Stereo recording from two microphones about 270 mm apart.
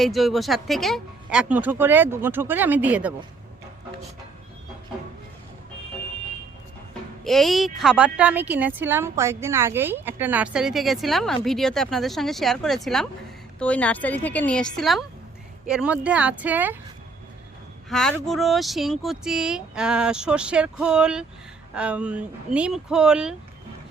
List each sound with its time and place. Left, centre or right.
0.0 s a woman's voice: centre
7.3 s a woman's voice: centre
17.8 s a woman's voice: centre